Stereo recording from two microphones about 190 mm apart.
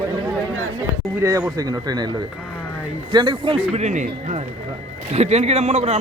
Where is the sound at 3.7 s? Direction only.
35° right (ahead or behind).